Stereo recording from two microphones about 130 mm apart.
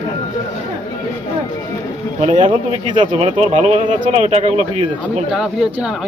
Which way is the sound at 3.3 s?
65° right (ahead or behind).